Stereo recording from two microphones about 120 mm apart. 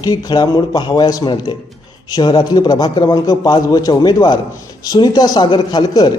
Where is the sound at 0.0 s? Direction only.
35° left (ahead or behind).